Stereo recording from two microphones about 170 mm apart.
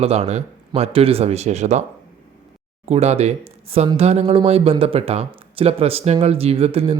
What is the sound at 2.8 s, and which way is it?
Speech, 40° right (ahead or behind).